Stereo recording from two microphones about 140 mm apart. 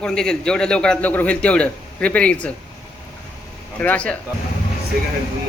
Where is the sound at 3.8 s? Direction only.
10° left (ahead or behind).